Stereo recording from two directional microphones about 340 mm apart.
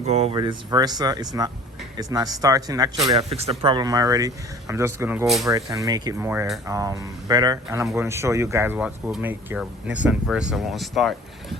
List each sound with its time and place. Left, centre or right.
0.0 s speech: centre